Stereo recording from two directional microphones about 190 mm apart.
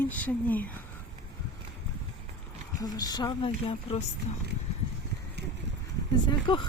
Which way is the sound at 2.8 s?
20° left (ahead or behind).